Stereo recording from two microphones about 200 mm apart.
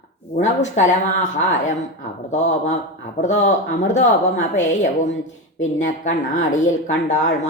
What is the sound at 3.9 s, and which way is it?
A woman's voice, 35° left (ahead or behind).